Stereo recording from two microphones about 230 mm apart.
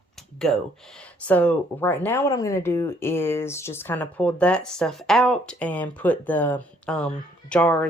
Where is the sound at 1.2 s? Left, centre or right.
Centre.